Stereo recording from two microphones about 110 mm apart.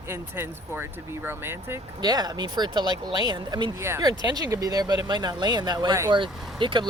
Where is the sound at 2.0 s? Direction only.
40° right (ahead or behind).